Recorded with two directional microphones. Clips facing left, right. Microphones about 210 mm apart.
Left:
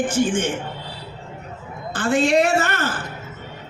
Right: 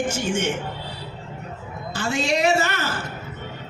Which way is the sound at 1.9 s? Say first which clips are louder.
Left 6 dB; 50° left (ahead or behind).